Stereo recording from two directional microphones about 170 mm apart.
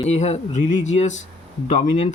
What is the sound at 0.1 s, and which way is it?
Speech, 40° left (ahead or behind).